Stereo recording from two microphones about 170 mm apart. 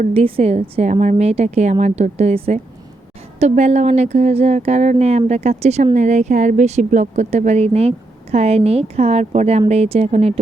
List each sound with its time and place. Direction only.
0.0 s speech: 35° right (ahead or behind)